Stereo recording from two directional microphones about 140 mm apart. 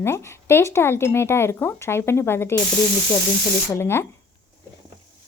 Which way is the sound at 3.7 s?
15° left (ahead or behind).